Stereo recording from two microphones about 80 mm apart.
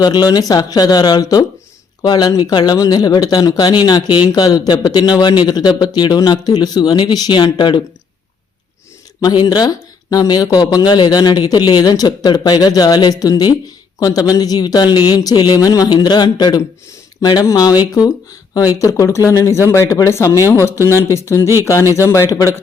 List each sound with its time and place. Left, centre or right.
0.0 s speech: left
2.7 s speech: left
3.7 s speech: left
9.4 s speech: left
15.9 s speech: left